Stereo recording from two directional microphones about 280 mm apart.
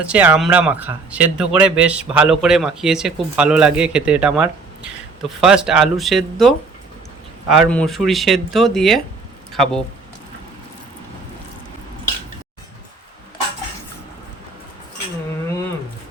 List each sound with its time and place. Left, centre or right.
0.0 s speech: centre
7.5 s speech: centre